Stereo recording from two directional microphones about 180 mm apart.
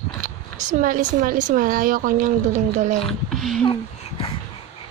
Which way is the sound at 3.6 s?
30° left (ahead or behind).